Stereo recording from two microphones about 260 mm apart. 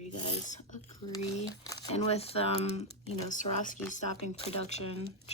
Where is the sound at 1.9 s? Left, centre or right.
Left.